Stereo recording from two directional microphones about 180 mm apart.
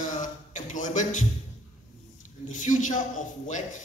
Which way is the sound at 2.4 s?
45° left (ahead or behind).